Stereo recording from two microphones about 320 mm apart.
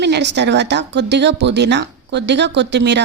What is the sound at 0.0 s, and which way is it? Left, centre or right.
Speech, right.